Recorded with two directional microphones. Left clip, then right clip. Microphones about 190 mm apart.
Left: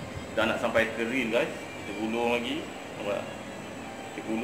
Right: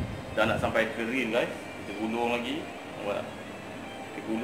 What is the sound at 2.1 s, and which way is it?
Speech, centre (ahead or behind).